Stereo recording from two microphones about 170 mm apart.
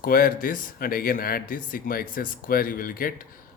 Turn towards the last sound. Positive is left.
turn(degrees=55)  # may be behind; listen again after turning